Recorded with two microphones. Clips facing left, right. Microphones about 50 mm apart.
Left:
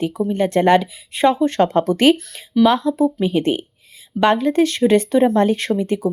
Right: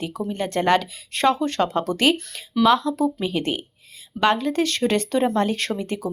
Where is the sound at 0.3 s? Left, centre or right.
Left.